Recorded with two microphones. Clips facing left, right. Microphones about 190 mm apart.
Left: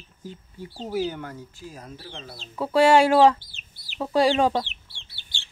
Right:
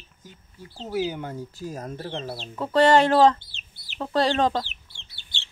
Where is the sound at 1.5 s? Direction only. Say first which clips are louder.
Right 7 dB; 45° right (ahead or behind); by 2.4 s 65° right (ahead or behind).